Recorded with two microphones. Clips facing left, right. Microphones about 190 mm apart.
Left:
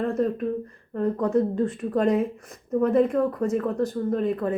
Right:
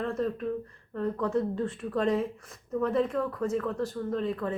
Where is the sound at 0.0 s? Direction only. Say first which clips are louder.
Left 6 dB; 45° left (ahead or behind).